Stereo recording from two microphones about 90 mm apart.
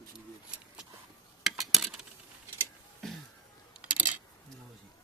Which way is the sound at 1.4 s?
Centre (ahead or behind).